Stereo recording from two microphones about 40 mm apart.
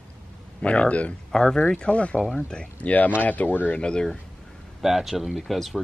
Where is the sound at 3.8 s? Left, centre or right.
Left.